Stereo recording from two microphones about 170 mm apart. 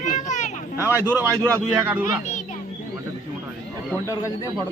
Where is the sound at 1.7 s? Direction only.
10° right (ahead or behind).